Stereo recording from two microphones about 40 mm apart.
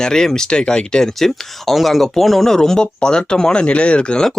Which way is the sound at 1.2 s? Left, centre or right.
Centre.